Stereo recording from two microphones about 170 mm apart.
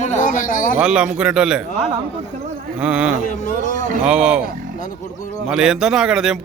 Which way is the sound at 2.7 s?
5° right (ahead or behind).